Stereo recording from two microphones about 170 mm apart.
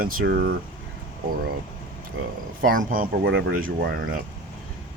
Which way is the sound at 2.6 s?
55° right (ahead or behind).